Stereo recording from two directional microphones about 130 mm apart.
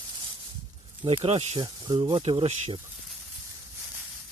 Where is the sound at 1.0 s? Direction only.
45° right (ahead or behind).